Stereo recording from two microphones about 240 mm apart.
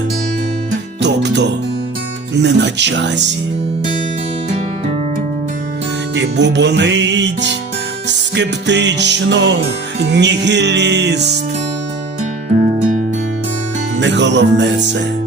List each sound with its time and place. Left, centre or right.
1.0 s music: right
6.1 s music: right
12.8 s music: right
14.0 s music: right